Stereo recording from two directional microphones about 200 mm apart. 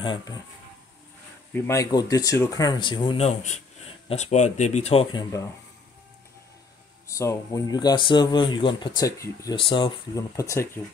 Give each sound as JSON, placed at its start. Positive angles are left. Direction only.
{"t": 0.0, "sound": "speech", "side_deg": 25}
{"t": 1.5, "sound": "speech", "side_deg": 15}
{"t": 7.1, "sound": "speech", "side_deg": 15}